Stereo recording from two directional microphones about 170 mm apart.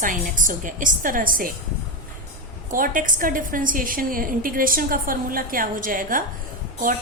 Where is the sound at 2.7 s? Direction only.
55° right (ahead or behind).